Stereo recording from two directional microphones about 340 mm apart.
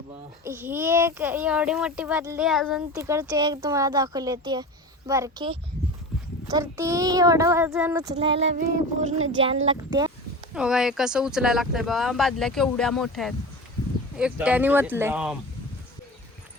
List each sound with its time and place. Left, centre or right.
0.4 s speech: centre
8.1 s speech: centre
8.4 s a sound: right
9.1 s speech: right
9.4 s speech: centre
10.5 s speech: centre